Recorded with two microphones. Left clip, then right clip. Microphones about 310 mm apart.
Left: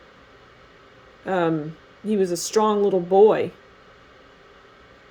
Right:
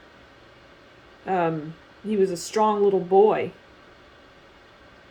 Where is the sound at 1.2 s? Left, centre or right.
Left.